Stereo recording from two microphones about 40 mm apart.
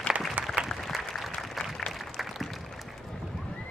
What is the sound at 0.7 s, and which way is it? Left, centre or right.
Applause, centre.